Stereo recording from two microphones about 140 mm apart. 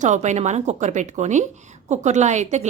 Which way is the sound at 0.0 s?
60° right (ahead or behind).